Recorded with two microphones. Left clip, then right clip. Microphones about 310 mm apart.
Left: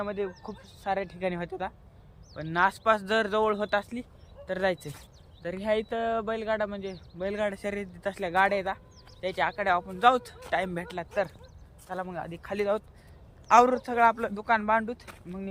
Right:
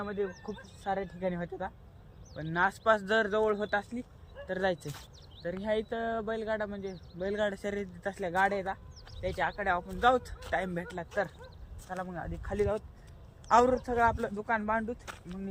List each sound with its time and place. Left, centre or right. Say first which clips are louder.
0.0 s speech: left 3 dB; centre
1.2 s speech: left 3 dB; centre
13.8 s speech: left 4 dB; centre